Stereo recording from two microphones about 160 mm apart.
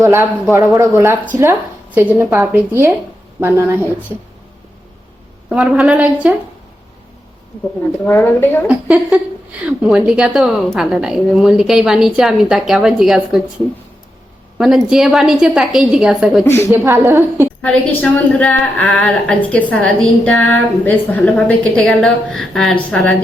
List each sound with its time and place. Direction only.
0.0 s speech: 20° right (ahead or behind)
5.5 s speech: 5° right (ahead or behind)
8.0 s a woman's voice: 15° left (ahead or behind)
8.6 s a woman's voice: 10° right (ahead or behind)
14.6 s a woman's voice: centre (ahead or behind)
16.7 s speech: 20° right (ahead or behind)
17.6 s a woman's voice: 10° left (ahead or behind)